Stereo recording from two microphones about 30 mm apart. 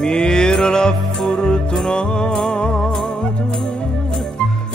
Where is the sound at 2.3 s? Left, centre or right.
Centre.